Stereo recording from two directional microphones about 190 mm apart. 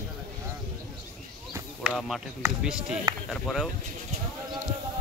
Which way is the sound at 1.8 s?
Centre (ahead or behind).